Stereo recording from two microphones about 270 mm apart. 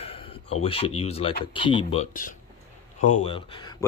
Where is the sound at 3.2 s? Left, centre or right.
Centre.